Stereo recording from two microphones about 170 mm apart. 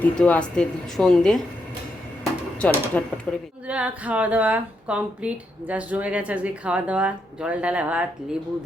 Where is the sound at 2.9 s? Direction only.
5° left (ahead or behind).